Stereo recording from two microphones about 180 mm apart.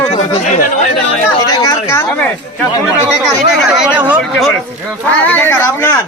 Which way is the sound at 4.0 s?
10° right (ahead or behind).